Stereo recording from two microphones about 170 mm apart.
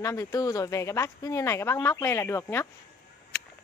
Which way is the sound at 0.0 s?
20° left (ahead or behind).